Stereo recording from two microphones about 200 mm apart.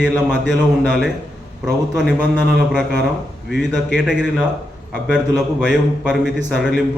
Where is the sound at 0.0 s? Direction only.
5° right (ahead or behind).